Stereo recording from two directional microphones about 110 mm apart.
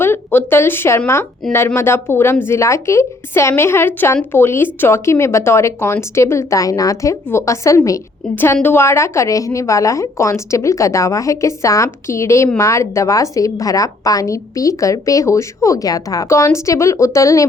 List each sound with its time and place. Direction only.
0.0 s a woman's voice: 20° left (ahead or behind)